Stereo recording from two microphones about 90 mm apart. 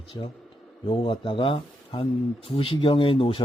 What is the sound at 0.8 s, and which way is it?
Speech, 70° left (ahead or behind).